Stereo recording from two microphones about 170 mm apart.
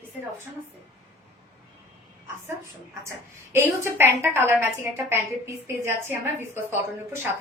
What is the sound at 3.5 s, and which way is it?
A woman's voice, 15° right (ahead or behind).